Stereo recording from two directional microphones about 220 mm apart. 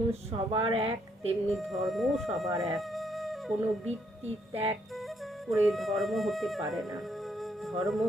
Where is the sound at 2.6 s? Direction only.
Centre (ahead or behind).